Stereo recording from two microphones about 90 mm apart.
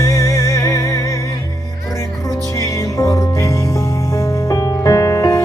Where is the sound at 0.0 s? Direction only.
35° left (ahead or behind).